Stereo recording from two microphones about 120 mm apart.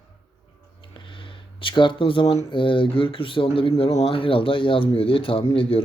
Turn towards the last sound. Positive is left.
turn(degrees=50)  # may be behind; listen again after turning